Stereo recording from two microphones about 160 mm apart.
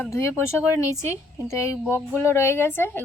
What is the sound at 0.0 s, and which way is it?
Speech, 15° left (ahead or behind).